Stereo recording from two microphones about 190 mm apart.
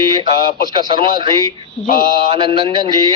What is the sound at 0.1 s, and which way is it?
A man's voice, 25° right (ahead or behind).